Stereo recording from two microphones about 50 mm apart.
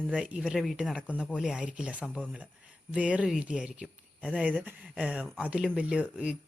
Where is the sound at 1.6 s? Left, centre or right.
Right.